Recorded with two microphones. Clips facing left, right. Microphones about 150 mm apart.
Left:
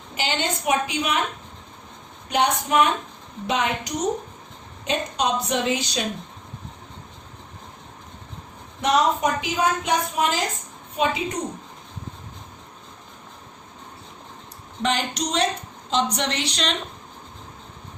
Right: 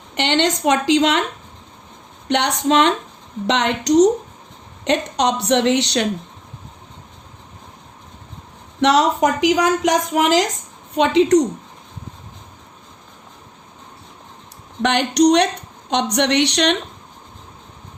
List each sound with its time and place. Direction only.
0.1 s a woman's voice: 70° right (ahead or behind)
2.3 s a woman's voice: 75° right (ahead or behind)
8.8 s a woman's voice: 90° right
10.9 s a woman's voice: 75° right (ahead or behind)
14.8 s a woman's voice: 70° right (ahead or behind)